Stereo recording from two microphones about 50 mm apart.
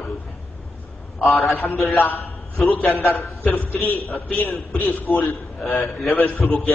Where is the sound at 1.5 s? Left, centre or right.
Left.